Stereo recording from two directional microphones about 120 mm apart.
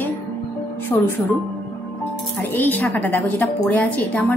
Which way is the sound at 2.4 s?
15° left (ahead or behind).